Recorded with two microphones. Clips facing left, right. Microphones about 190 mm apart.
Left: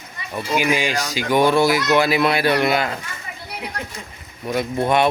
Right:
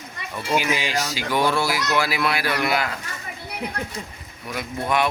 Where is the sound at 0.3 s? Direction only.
15° left (ahead or behind).